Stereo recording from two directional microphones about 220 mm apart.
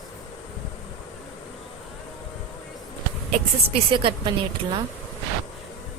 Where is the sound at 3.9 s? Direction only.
25° right (ahead or behind).